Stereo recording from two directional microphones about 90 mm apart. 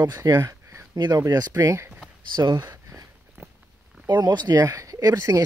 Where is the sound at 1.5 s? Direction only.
35° right (ahead or behind).